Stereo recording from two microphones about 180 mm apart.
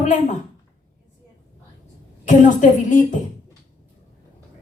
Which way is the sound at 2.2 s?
45° left (ahead or behind).